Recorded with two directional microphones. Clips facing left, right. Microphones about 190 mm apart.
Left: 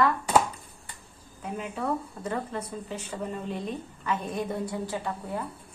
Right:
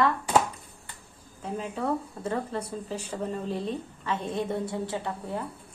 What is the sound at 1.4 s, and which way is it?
Speech, 30° right (ahead or behind).